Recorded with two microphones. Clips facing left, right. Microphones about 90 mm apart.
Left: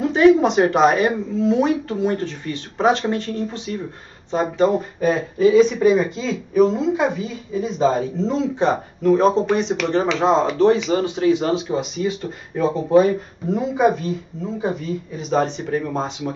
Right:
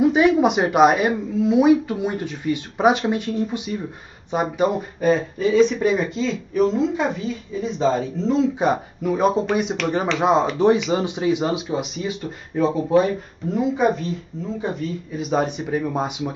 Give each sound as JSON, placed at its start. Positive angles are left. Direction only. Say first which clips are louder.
{"t": 0.0, "sound": "a woman's voice", "louder": "left 2 dB", "side_deg": -10}
{"t": 4.7, "sound": "a woman's voice", "louder": "even", "side_deg": 0}
{"t": 11.7, "sound": "speech", "louder": "left 3 dB", "side_deg": -5}